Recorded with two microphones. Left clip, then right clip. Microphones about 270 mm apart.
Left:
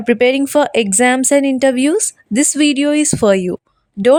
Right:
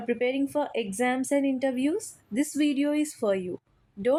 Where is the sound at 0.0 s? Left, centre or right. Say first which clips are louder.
Left 14 dB; left.